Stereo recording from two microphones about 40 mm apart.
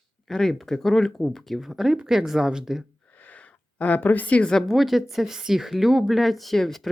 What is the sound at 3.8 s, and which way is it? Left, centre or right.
Speech, left.